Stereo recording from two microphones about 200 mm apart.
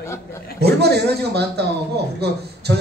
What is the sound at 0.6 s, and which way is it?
A man's voice, 55° right (ahead or behind).